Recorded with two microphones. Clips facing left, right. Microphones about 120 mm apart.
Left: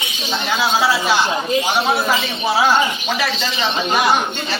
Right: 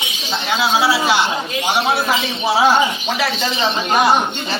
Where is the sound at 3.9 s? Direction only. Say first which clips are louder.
Right 2 dB; 25° right (ahead or behind).